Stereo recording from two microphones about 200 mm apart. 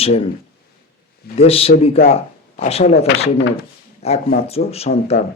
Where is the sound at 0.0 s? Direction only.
30° left (ahead or behind).